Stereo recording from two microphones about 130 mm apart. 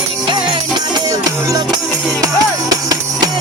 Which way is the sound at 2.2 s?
30° right (ahead or behind).